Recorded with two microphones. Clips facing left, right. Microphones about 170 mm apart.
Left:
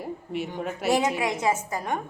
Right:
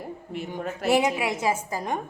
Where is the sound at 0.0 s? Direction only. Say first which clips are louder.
Left 3 dB; centre (ahead or behind).